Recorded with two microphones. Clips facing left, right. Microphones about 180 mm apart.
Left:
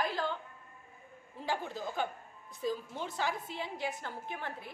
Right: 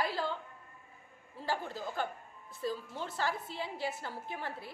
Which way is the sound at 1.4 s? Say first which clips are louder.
Even; 20° left (ahead or behind).